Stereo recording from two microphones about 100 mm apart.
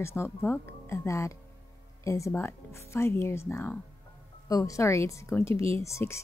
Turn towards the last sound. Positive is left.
turn(degrees=30)  # may be behind; listen again after turning